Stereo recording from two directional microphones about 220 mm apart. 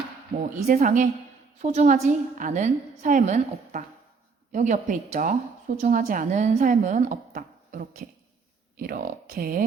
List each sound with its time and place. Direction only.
0.5 s speech: 35° right (ahead or behind)